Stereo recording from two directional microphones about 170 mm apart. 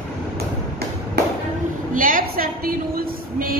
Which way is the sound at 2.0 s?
55° right (ahead or behind).